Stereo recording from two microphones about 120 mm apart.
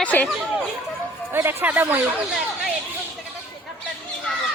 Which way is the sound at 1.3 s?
20° right (ahead or behind).